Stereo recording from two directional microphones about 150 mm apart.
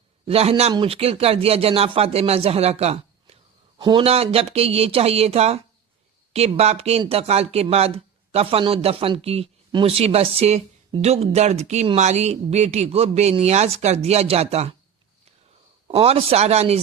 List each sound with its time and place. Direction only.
0.3 s speech: 40° right (ahead or behind)
15.9 s speech: 40° right (ahead or behind)